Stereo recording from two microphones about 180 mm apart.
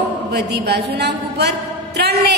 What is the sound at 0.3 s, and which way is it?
A woman's voice, 65° right (ahead or behind).